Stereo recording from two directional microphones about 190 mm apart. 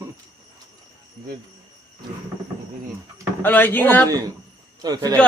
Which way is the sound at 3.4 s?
10° left (ahead or behind).